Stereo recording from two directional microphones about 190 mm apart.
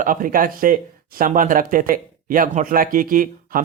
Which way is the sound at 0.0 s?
45° right (ahead or behind).